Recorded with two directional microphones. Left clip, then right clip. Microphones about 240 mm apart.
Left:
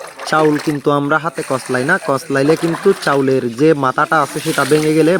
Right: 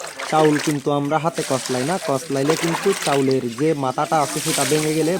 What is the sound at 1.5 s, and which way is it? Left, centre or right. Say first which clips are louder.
Speech: left 6 dB; left.